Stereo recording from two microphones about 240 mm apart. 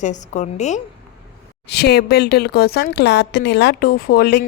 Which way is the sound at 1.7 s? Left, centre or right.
Left.